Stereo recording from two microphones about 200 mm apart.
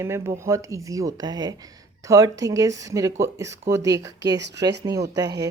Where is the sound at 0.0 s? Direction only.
10° right (ahead or behind).